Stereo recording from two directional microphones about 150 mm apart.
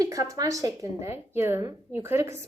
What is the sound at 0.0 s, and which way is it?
A woman's voice, 20° right (ahead or behind).